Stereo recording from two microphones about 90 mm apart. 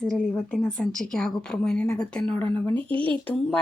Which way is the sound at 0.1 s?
5° left (ahead or behind).